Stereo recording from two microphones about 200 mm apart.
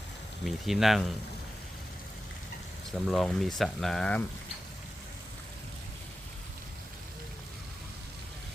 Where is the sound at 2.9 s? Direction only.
Centre (ahead or behind).